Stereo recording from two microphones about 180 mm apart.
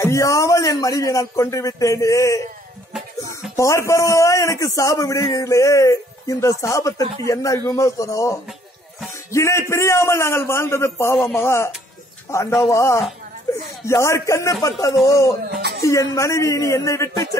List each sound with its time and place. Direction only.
0.0 s a man's voice: 15° left (ahead or behind)
3.5 s a man's voice: 15° left (ahead or behind)
13.5 s a sound: 20° left (ahead or behind)
13.8 s a man's voice: 15° left (ahead or behind)